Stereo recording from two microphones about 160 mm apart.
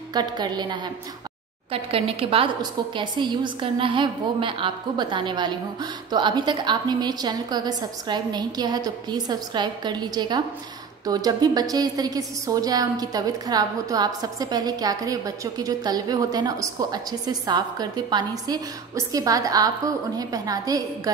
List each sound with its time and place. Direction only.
0.1 s a woman's voice: 25° right (ahead or behind)